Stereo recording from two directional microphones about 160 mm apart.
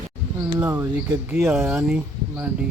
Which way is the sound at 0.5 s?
20° right (ahead or behind).